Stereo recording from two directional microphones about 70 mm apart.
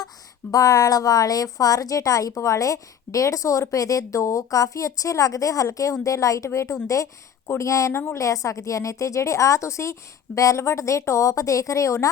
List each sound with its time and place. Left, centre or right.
0.5 s a woman's voice: left
8.2 s a woman's voice: left